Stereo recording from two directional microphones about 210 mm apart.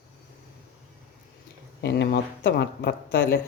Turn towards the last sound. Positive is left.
turn(degrees=50)  # may be behind; listen again after turning